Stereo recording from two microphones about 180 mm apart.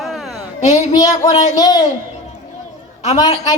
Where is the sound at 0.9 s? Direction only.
20° left (ahead or behind).